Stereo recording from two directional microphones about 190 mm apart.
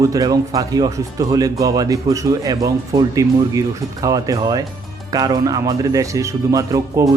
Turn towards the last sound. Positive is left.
turn(degrees=-15)  # may be behind; listen again after turning